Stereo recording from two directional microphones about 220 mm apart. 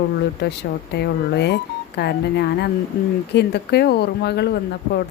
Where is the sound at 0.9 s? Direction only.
50° left (ahead or behind).